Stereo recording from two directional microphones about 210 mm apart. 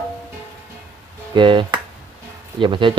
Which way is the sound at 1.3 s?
25° right (ahead or behind).